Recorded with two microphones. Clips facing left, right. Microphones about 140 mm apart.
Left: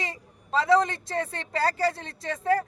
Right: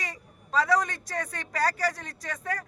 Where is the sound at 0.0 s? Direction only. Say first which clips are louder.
Left 4 dB; 25° left (ahead or behind).